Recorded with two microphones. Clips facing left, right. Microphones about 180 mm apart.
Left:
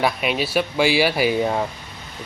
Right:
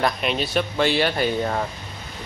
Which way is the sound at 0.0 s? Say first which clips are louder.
Left 2 dB; 5° left (ahead or behind).